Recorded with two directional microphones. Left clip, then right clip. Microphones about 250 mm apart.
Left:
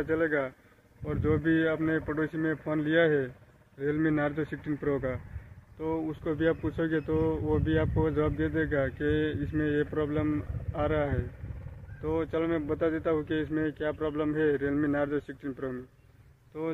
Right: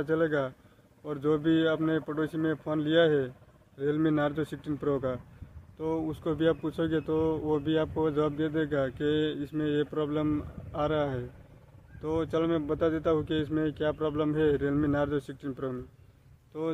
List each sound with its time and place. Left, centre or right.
0.0 s speech: centre